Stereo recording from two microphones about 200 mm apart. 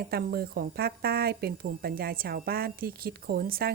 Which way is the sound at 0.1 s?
50° right (ahead or behind).